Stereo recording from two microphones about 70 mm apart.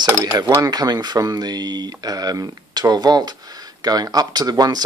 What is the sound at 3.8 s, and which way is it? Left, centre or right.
Speech, right.